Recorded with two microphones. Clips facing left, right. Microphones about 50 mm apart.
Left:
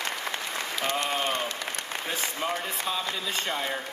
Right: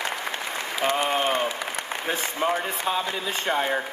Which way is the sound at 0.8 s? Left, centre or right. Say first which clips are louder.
Right 6 dB; centre.